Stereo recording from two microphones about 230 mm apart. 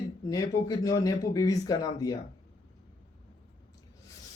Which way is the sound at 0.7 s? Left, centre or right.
Centre.